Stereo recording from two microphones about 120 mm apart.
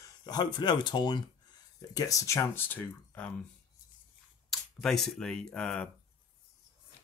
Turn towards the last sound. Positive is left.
turn(degrees=10)  # may be behind; listen again after turning